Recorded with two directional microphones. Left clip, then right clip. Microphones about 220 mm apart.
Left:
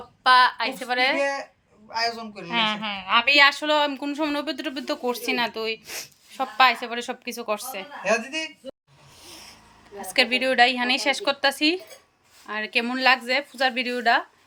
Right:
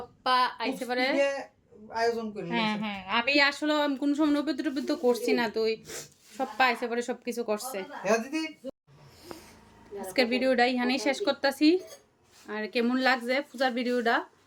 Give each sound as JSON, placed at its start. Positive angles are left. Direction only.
{"t": 0.2, "sound": "speech", "side_deg": 5}
{"t": 1.9, "sound": "a man's voice", "side_deg": -30}
{"t": 2.5, "sound": "speech", "side_deg": 0}
{"t": 3.0, "sound": "a woman's voice", "side_deg": 35}
{"t": 3.2, "sound": "speech", "side_deg": -5}
{"t": 8.0, "sound": "a man's voice", "side_deg": -40}
{"t": 9.2, "sound": "a sound", "side_deg": -5}
{"t": 10.0, "sound": "speech", "side_deg": -10}